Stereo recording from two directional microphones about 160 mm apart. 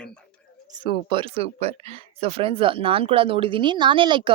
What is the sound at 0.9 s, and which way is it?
Speech, 35° right (ahead or behind).